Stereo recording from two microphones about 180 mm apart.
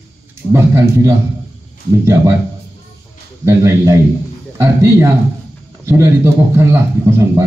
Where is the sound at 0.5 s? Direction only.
15° right (ahead or behind).